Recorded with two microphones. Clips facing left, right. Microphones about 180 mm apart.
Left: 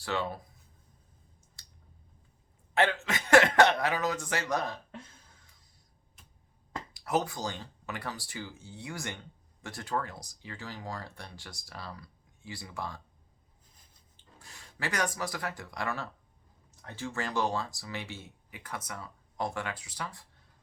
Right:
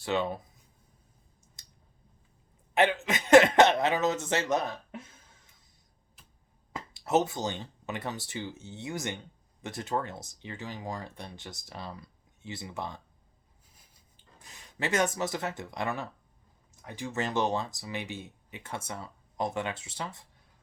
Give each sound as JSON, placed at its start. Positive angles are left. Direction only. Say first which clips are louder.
{"t": 0.0, "sound": "speech", "louder": "right 4 dB", "side_deg": -20}
{"t": 1.6, "sound": "clicking", "louder": "even", "side_deg": -20}
{"t": 2.7, "sound": "speech", "louder": "right 2 dB", "side_deg": -20}
{"t": 6.9, "sound": "speech", "louder": "right 4 dB", "side_deg": -25}
{"t": 14.3, "sound": "speech", "louder": "right 4 dB", "side_deg": -20}